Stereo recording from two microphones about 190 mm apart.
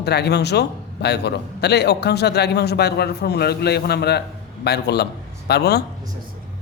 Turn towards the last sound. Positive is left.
turn(degrees=60)  # may be behind; listen again after turning